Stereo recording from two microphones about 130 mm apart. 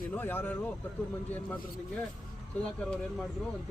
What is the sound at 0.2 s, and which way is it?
Speech, 15° left (ahead or behind).